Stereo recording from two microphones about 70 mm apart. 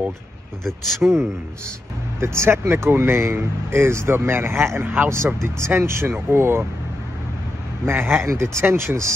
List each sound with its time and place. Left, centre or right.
0.7 s speech: centre
2.1 s speech: right
7.8 s speech: right